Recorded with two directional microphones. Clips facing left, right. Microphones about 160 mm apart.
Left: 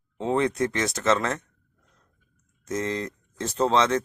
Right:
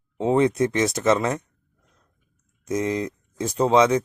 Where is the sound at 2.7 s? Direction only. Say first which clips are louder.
Right 4 dB; 15° right (ahead or behind).